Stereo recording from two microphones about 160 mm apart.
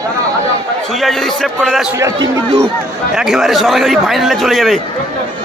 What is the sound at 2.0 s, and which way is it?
Speech, 20° right (ahead or behind).